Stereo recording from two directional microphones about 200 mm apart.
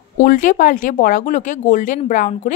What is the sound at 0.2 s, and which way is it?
Speech, 40° left (ahead or behind).